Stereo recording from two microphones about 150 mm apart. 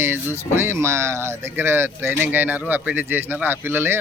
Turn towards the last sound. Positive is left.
turn(degrees=-15)  # may be behind; listen again after turning